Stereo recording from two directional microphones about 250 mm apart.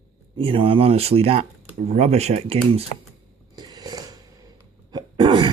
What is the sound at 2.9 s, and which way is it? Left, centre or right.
Speech, left.